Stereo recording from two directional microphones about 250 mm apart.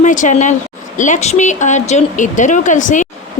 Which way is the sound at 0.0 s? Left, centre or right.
Left.